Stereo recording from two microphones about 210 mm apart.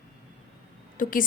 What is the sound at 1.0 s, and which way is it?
Speech, 40° left (ahead or behind).